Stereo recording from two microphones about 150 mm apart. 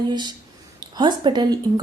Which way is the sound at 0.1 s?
30° right (ahead or behind).